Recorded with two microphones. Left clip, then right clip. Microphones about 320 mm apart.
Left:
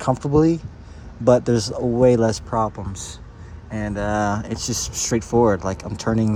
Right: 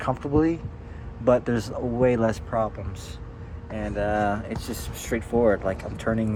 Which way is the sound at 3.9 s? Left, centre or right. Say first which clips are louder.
Left 2 dB; right.